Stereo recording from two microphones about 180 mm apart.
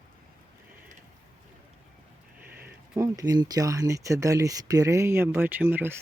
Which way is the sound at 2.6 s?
15° right (ahead or behind).